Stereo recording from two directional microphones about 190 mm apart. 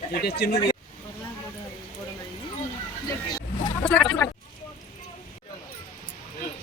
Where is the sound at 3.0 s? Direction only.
20° left (ahead or behind).